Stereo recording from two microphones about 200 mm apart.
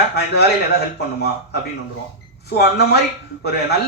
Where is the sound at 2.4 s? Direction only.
55° left (ahead or behind).